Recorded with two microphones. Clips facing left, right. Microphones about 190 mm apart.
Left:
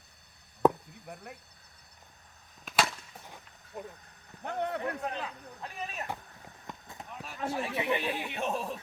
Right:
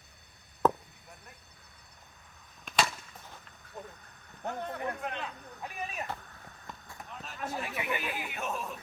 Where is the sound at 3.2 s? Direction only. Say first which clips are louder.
Left 1 dB; 15° left (ahead or behind).